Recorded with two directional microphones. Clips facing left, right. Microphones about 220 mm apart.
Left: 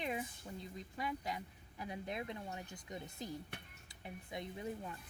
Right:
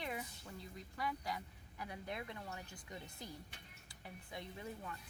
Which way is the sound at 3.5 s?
60° left (ahead or behind).